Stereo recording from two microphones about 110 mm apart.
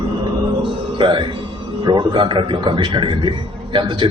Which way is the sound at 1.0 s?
50° right (ahead or behind).